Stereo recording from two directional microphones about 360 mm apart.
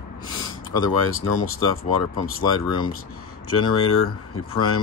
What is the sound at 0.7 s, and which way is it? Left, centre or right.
Speech, left.